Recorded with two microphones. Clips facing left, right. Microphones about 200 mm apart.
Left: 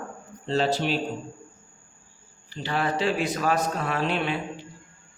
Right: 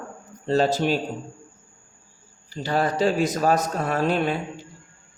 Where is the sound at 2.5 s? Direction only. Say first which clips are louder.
Right 3 dB; 40° right (ahead or behind).